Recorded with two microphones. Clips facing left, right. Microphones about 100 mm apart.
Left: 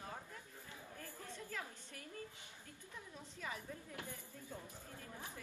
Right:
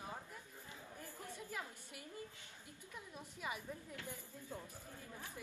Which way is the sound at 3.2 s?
15° right (ahead or behind).